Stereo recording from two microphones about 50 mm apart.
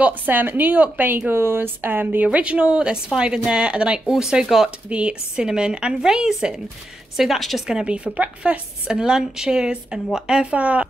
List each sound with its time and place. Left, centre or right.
0.0 s speech: right
2.2 s a woman's voice: right
4.8 s speech: right
7.2 s a woman's voice: centre
7.6 s a woman's voice: centre
8.9 s speech: centre
10.5 s a woman's voice: right